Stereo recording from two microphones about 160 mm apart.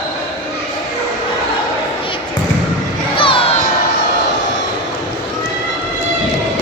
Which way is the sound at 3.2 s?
35° left (ahead or behind).